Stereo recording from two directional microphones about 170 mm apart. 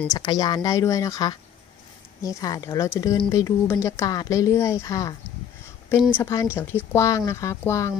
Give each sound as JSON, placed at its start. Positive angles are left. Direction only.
{"t": 0.1, "sound": "speech", "side_deg": 25}
{"t": 6.1, "sound": "speech", "side_deg": 15}